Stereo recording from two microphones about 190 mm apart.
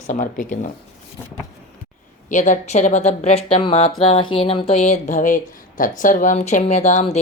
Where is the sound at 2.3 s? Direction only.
40° left (ahead or behind).